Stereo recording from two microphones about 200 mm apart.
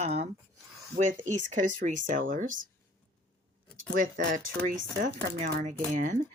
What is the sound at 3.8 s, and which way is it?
Speech, 40° right (ahead or behind).